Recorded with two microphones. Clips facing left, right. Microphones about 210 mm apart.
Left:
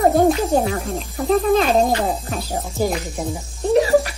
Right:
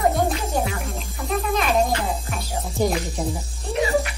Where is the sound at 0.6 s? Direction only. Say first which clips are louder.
Left 5 dB; 30° left (ahead or behind).